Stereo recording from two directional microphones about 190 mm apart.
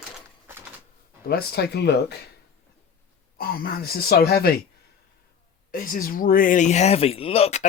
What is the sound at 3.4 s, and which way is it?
Speech, 50° left (ahead or behind).